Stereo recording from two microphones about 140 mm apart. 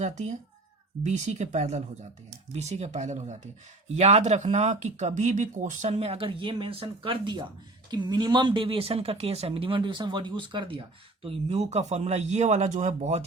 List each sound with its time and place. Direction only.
0.0 s speech: 55° right (ahead or behind)
5.9 s speech: 45° right (ahead or behind)